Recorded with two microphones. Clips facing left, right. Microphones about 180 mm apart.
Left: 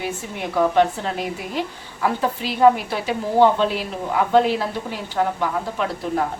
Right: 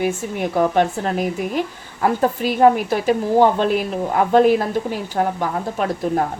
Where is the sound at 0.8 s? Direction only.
50° right (ahead or behind).